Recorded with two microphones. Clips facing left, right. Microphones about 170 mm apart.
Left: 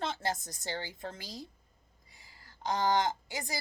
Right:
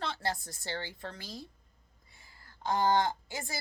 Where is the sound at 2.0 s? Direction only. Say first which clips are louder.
Even; 15° left (ahead or behind).